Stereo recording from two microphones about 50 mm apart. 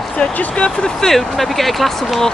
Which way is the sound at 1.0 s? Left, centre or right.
Centre.